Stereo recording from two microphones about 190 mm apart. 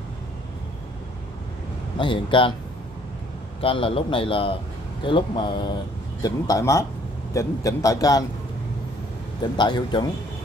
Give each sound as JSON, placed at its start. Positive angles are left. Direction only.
{"t": 2.0, "sound": "a man's voice", "side_deg": 25}
{"t": 3.6, "sound": "a man's voice", "side_deg": 30}
{"t": 9.4, "sound": "a man's voice", "side_deg": 25}